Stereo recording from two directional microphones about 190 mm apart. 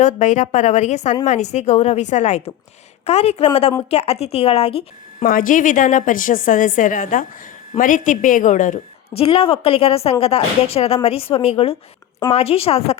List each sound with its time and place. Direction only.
0.0 s a woman's voice: 40° left (ahead or behind)
5.2 s a woman's voice: 45° left (ahead or behind)
9.2 s a woman's voice: 30° left (ahead or behind)